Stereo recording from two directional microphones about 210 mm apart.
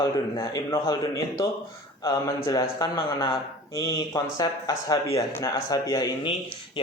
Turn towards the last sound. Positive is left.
turn(degrees=20)  # may be behind; listen again after turning